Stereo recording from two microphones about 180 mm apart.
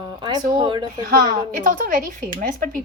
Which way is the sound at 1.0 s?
50° right (ahead or behind).